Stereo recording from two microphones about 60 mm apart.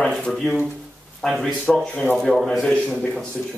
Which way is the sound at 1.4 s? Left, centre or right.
Centre.